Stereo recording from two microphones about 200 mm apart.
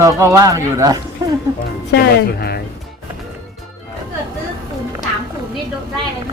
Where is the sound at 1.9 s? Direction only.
50° left (ahead or behind).